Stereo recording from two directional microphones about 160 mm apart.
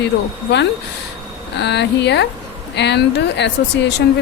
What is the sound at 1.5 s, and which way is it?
Speech, 90° left.